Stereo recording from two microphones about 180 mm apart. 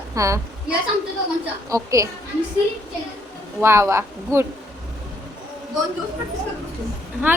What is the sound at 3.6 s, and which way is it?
Speech, 15° right (ahead or behind).